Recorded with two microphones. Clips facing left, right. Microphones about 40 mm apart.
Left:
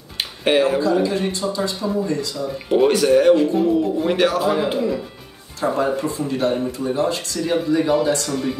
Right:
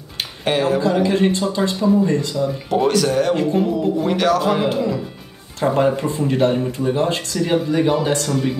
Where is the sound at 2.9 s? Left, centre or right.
Centre.